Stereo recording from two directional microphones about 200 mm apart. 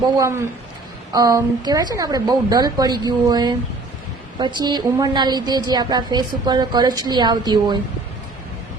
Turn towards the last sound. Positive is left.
turn(degrees=-20)  # may be behind; listen again after turning